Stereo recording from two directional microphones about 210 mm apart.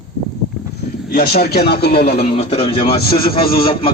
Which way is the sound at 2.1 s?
30° left (ahead or behind).